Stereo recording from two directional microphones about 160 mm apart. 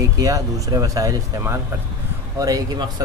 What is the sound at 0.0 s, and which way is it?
Speech, 20° right (ahead or behind).